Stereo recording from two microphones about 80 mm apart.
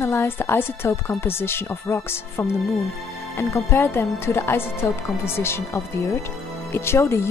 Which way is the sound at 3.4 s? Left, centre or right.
Left.